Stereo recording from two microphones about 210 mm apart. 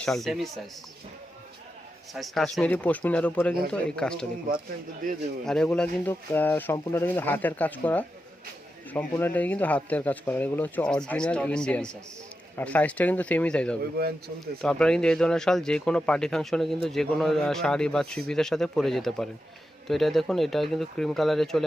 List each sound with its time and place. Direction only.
0.0 s speech: centre (ahead or behind)
2.1 s speech: centre (ahead or behind)
5.5 s speech: 5° left (ahead or behind)
14.0 s speech: 50° right (ahead or behind)
14.6 s speech: 5° left (ahead or behind)